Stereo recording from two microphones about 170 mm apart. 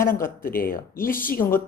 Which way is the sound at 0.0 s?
60° left (ahead or behind).